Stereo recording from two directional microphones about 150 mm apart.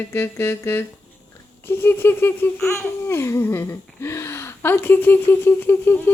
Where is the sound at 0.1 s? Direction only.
15° left (ahead or behind).